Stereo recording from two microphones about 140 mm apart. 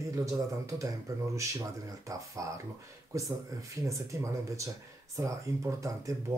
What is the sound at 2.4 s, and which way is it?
Speech, 25° right (ahead or behind).